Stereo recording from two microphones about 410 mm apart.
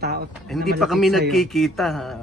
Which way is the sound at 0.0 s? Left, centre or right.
Right.